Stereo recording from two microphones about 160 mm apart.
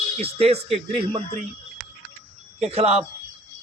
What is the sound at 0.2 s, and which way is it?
A man's voice, 40° right (ahead or behind).